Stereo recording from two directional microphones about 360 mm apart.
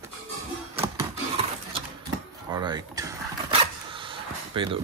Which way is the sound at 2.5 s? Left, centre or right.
Centre.